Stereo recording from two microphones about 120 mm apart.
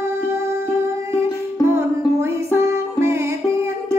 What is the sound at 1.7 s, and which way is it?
Music, 20° right (ahead or behind).